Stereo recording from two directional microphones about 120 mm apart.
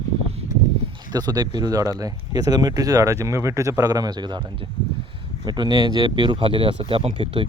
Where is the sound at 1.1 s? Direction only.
35° right (ahead or behind).